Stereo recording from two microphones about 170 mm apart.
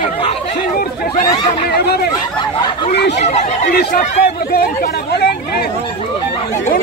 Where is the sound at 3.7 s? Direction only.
60° left (ahead or behind).